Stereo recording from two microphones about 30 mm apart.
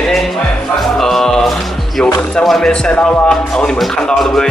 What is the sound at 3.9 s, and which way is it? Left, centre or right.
Speech, left.